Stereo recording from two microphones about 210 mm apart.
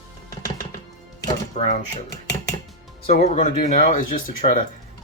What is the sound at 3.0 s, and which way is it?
Speech, 30° left (ahead or behind).